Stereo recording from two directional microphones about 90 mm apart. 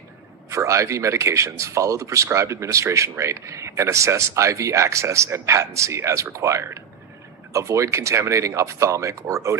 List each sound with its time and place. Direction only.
0.5 s speech: 35° right (ahead or behind)